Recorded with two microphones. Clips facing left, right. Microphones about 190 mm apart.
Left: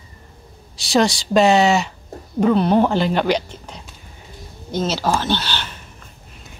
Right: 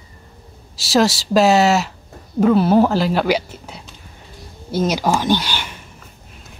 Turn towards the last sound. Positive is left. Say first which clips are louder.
# right 4 dB
turn(degrees=-10)  # may be behind; listen again after turning